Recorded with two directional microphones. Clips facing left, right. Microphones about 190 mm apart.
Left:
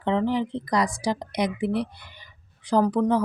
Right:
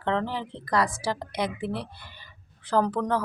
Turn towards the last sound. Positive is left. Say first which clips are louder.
# left 4 dB
turn(degrees=15)  # may be behind; listen again after turning